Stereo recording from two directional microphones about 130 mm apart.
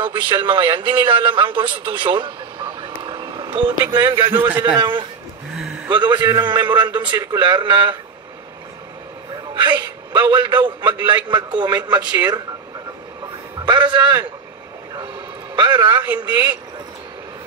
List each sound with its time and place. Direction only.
0.0 s a man's voice: 40° right (ahead or behind)
4.3 s a man's voice: 15° right (ahead or behind)
4.7 s a man's voice: 35° right (ahead or behind)
9.5 s a man's voice: 35° right (ahead or behind)
13.6 s a man's voice: 35° right (ahead or behind)
15.5 s a man's voice: 35° right (ahead or behind)